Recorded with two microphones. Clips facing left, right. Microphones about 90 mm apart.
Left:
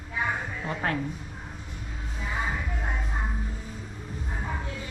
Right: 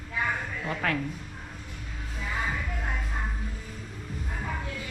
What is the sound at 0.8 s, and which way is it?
Speech, 25° left (ahead or behind).